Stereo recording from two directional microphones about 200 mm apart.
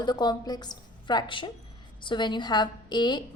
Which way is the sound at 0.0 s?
20° left (ahead or behind).